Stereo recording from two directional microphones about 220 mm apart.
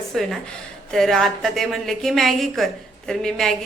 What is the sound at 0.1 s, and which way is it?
Speech, centre (ahead or behind).